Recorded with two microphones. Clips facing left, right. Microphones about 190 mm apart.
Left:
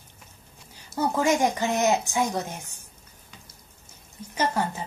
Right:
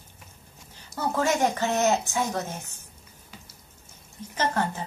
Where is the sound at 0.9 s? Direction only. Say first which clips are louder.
Left 2 dB; 15° left (ahead or behind).